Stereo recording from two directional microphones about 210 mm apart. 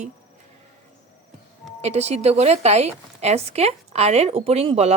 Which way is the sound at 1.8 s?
30° right (ahead or behind).